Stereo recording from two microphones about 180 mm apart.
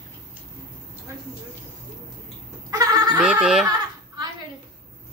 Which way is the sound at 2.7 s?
20° right (ahead or behind).